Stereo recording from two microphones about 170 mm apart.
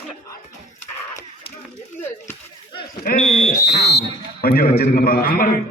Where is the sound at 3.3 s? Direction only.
40° left (ahead or behind).